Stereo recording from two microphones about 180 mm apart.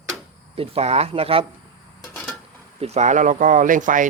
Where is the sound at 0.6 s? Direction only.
35° right (ahead or behind).